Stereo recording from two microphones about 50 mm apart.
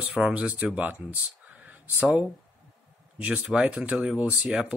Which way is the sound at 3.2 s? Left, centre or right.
Right.